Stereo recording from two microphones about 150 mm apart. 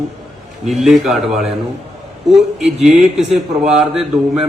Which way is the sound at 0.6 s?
Centre (ahead or behind).